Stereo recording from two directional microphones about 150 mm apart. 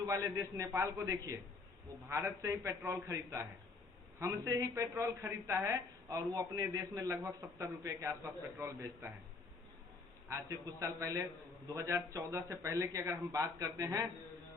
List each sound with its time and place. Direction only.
0.0 s a man's voice: 20° right (ahead or behind)
10.2 s speech: 20° right (ahead or behind)